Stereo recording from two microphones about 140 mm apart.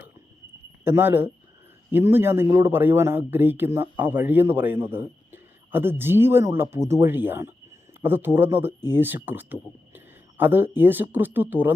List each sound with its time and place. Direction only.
0.9 s a man's voice: 15° right (ahead or behind)